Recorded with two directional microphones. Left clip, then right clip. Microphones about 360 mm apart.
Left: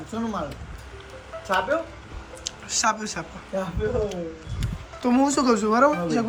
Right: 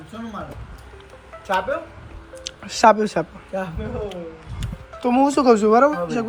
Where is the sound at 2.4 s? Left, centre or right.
Centre.